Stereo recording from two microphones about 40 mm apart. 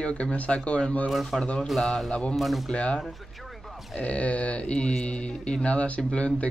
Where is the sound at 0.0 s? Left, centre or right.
Left.